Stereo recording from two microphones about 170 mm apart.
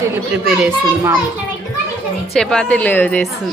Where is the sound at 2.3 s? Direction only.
5° left (ahead or behind).